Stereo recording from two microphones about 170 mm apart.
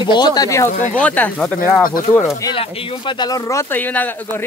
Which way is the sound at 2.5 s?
30° left (ahead or behind).